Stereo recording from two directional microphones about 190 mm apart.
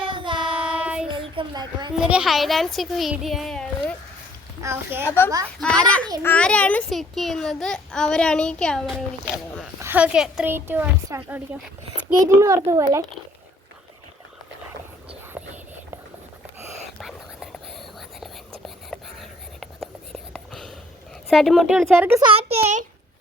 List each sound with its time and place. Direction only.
0.0 s child singing: 25° right (ahead or behind)
0.7 s child singing: 5° right (ahead or behind)
1.1 s a sound: 25° right (ahead or behind)
2.0 s a child's voice: 5° right (ahead or behind)
4.6 s a child's voice: 10° right (ahead or behind)
5.0 s a woman's voice: 10° left (ahead or behind)
9.8 s a child's voice: 10° right (ahead or behind)
15.4 s whispering: 5° right (ahead or behind)
17.0 s whispering: centre (ahead or behind)
18.6 s writing: centre (ahead or behind)
21.2 s a child's voice: centre (ahead or behind)
22.2 s a child's voice: 30° right (ahead or behind)